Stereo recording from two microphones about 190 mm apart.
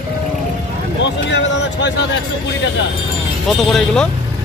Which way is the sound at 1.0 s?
65° left (ahead or behind).